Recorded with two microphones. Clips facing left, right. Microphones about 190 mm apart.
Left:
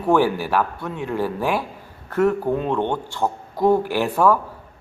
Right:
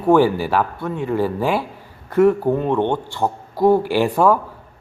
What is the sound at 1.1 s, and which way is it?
A man's voice, 15° right (ahead or behind).